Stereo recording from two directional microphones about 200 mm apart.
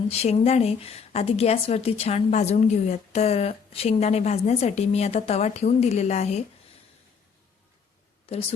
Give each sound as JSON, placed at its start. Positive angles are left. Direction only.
{"t": 0.1, "sound": "a woman's voice", "side_deg": 30}
{"t": 8.3, "sound": "a woman's voice", "side_deg": 30}